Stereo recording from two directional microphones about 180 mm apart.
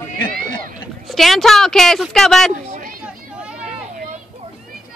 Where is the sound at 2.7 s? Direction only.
50° right (ahead or behind).